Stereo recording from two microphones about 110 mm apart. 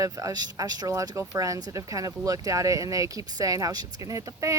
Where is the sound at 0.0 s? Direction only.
30° right (ahead or behind).